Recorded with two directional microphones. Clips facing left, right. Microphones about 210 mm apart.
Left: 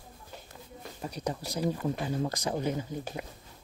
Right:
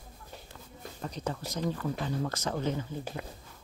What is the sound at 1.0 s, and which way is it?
Speech, 10° left (ahead or behind).